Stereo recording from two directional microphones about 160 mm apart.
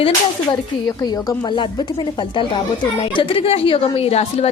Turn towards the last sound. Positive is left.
turn(degrees=40)  # may be behind; listen again after turning